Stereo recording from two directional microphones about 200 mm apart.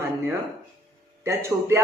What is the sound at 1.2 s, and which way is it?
Speech, 15° right (ahead or behind).